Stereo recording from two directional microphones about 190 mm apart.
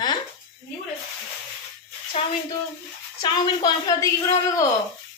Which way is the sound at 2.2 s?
30° left (ahead or behind).